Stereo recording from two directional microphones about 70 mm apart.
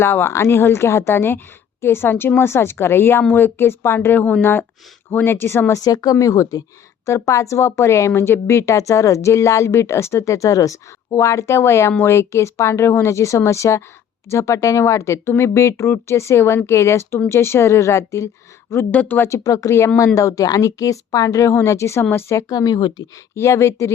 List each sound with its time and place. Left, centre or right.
0.0 s speech: left
5.7 s a woman's voice: left
18.9 s speech: left
19.4 s a woman's voice: left
21.5 s a woman's voice: left
22.5 s a woman's voice: left
23.3 s a woman's voice: left